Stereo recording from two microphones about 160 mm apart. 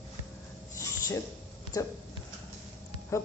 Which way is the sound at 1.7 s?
25° left (ahead or behind).